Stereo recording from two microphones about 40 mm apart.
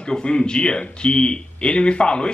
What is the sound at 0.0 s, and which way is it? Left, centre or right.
Speech, left.